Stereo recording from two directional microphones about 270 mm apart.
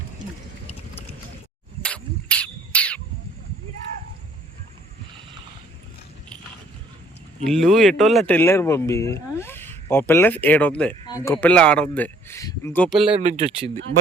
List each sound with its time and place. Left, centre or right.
1.8 s a sound: centre
7.4 s speech: centre
13.1 s speech: right